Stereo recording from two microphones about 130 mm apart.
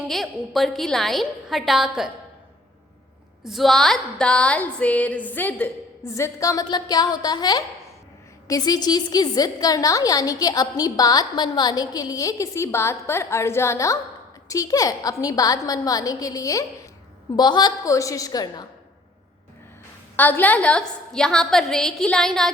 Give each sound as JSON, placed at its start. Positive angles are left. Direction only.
{"t": 0.0, "sound": "a woman's voice", "side_deg": 0}
{"t": 3.4, "sound": "a woman's voice", "side_deg": 0}
{"t": 20.1, "sound": "a woman's voice", "side_deg": 15}